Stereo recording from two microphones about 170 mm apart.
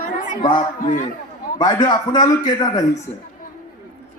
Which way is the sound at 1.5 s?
25° left (ahead or behind).